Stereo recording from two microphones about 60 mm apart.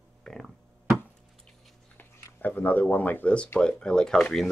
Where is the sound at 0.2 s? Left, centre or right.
Centre.